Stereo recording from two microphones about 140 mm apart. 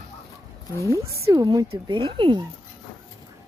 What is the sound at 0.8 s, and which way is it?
Speech, 20° right (ahead or behind).